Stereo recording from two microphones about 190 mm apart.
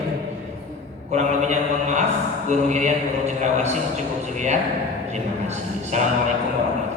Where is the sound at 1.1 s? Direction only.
35° right (ahead or behind).